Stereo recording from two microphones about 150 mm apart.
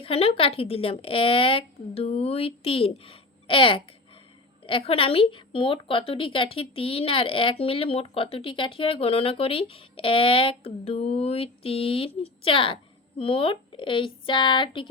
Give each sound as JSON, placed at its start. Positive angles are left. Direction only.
{"t": 0.0, "sound": "a woman's voice", "side_deg": 40}